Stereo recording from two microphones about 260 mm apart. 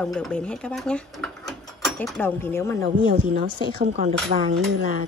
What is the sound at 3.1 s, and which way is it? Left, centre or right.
A woman's voice, right.